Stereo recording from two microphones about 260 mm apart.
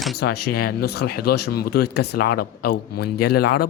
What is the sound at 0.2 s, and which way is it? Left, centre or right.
Speech, left.